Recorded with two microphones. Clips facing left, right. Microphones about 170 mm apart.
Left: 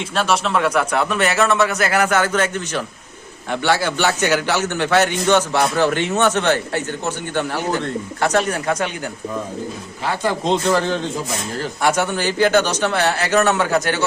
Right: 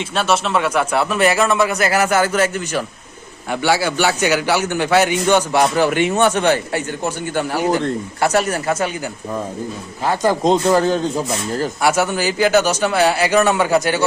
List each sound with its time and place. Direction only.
0.1 s a man's voice: centre (ahead or behind)
10.0 s a man's voice: 40° right (ahead or behind)
11.8 s a man's voice: 5° right (ahead or behind)